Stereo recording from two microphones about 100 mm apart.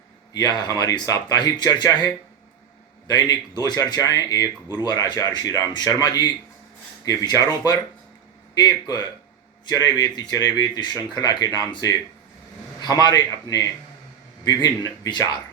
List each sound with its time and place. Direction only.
0.7 s speech: 40° left (ahead or behind)
8.5 s speech: 45° left (ahead or behind)